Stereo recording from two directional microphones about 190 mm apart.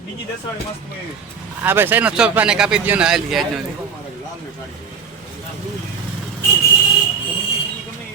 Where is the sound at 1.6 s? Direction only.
10° right (ahead or behind).